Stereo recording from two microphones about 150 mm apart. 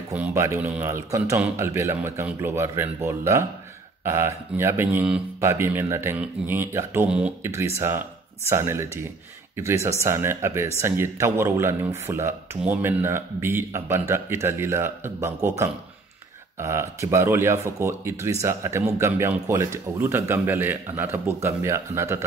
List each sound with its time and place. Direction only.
0.2 s speech: 20° right (ahead or behind)
16.5 s speech: 20° right (ahead or behind)